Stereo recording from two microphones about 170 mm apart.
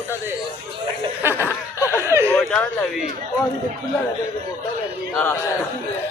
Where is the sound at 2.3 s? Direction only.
5° left (ahead or behind).